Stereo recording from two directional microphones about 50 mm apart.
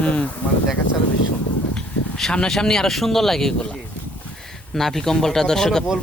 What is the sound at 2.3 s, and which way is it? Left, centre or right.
Speech, centre.